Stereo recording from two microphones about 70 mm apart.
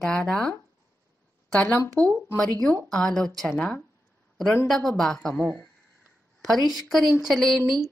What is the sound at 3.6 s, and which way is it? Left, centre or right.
Speech, left.